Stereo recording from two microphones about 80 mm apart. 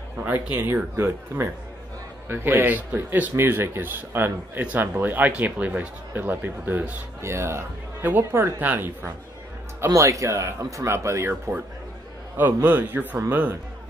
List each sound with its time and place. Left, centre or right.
0.2 s speech: right
9.8 s speech: right
12.6 s speech: right